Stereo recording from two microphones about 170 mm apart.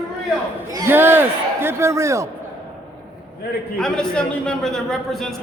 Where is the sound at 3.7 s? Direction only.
5° left (ahead or behind).